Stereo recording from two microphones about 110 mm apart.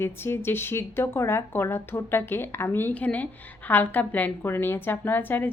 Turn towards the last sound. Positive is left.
turn(degrees=15)  # may be behind; listen again after turning